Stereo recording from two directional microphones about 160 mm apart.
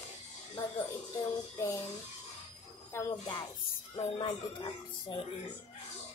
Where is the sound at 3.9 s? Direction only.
30° left (ahead or behind).